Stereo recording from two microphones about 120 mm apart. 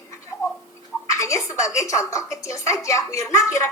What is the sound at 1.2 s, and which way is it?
A woman's voice, 25° left (ahead or behind).